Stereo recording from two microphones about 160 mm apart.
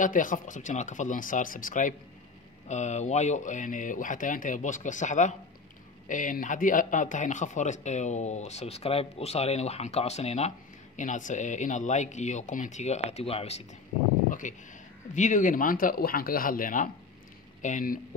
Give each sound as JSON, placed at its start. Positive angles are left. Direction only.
{"t": 0.0, "sound": "speech", "side_deg": 55}
{"t": 14.4, "sound": "speech", "side_deg": 50}